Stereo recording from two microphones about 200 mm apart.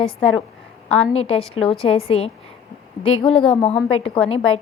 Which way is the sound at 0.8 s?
5° left (ahead or behind).